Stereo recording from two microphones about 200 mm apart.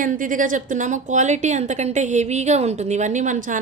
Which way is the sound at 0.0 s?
40° right (ahead or behind).